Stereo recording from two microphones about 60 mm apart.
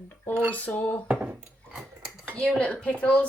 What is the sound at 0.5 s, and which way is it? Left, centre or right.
Speech, left.